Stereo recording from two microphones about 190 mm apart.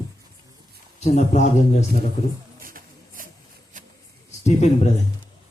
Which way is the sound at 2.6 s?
45° right (ahead or behind).